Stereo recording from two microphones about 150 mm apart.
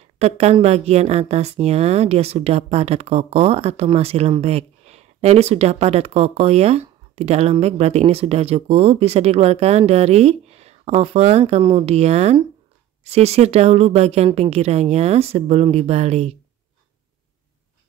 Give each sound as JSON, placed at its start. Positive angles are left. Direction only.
{"t": 0.2, "sound": "a woman's voice", "side_deg": -45}